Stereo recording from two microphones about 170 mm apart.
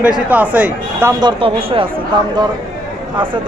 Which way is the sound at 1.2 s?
30° right (ahead or behind).